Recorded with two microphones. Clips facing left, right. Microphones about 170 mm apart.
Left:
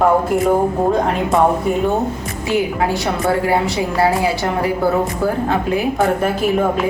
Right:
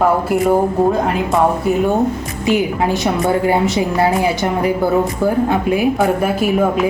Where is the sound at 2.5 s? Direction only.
20° right (ahead or behind).